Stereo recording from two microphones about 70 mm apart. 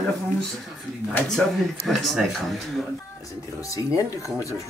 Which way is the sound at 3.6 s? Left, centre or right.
Left.